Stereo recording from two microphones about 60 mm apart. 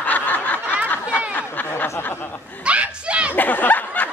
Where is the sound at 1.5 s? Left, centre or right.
Left.